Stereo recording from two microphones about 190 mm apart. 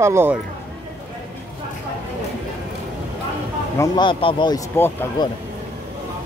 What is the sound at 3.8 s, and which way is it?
Speech, 25° left (ahead or behind).